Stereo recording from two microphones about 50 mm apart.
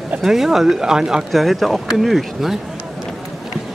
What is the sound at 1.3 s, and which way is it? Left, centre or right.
Speech, centre.